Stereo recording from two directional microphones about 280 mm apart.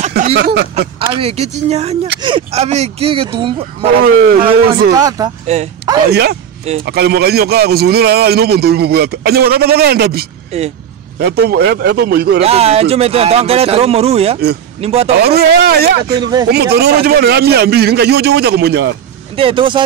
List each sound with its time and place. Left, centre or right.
0.1 s speech: right
0.7 s speech: centre
4.0 s a man's voice: right
4.9 s speech: centre
5.5 s speech: right
6.6 s speech: right
6.9 s a man's voice: right
10.5 s speech: right
11.1 s a man's voice: right
12.4 s speech: right
15.2 s a man's voice: right
16.2 s speech: centre
16.4 s a man's voice: right
19.3 s speech: centre